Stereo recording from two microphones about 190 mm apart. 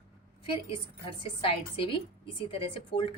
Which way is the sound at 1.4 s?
30° left (ahead or behind).